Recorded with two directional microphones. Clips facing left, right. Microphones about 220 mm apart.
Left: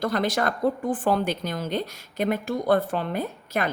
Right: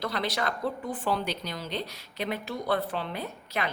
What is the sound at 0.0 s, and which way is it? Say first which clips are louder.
Speech: left 6 dB; 50° left (ahead or behind).